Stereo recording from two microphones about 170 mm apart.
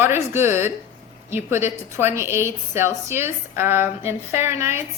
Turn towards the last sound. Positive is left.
turn(degrees=-15)  # may be behind; listen again after turning